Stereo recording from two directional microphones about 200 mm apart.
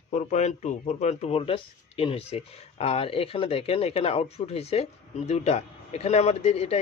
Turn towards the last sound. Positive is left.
turn(degrees=30)  # may be behind; listen again after turning